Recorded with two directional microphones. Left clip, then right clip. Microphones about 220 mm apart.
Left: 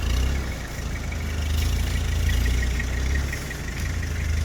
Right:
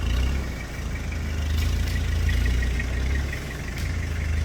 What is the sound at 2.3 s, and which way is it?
Vehicle, 35° left (ahead or behind).